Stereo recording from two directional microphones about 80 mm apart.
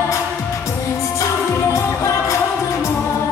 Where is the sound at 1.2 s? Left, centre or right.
Left.